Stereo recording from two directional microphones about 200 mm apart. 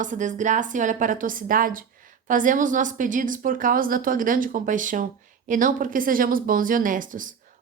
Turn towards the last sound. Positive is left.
turn(degrees=-40)  # may be behind; listen again after turning